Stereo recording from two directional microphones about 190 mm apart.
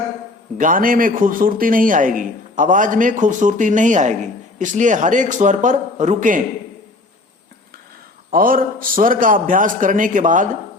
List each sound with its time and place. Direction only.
0.6 s speech: 45° right (ahead or behind)
8.3 s speech: 50° right (ahead or behind)